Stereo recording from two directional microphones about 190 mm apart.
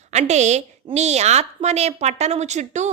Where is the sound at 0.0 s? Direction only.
35° right (ahead or behind).